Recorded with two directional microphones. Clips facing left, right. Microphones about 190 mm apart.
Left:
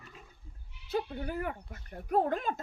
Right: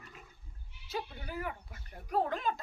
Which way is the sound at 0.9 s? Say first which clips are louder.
Left 6 dB; 55° left (ahead or behind).